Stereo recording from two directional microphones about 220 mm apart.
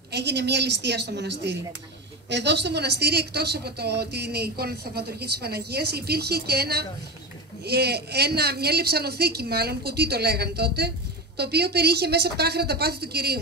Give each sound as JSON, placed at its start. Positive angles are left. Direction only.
{"t": 0.1, "sound": "speech", "side_deg": -50}